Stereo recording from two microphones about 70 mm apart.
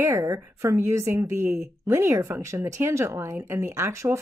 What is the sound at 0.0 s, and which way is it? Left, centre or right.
Speech, right.